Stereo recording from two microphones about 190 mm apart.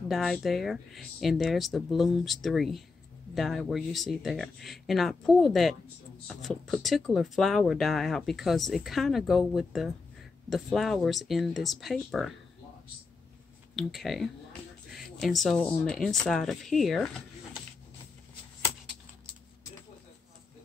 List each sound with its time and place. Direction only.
0.1 s speech: centre (ahead or behind)
13.7 s speech: centre (ahead or behind)